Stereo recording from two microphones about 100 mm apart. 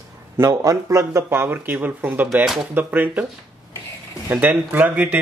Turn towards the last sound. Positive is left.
turn(degrees=-15)  # may be behind; listen again after turning